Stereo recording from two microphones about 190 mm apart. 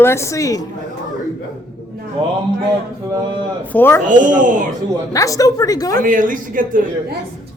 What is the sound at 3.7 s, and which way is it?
Speech, 10° left (ahead or behind).